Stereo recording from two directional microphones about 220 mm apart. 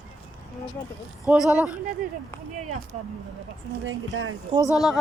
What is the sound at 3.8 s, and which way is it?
Speech, 65° right (ahead or behind).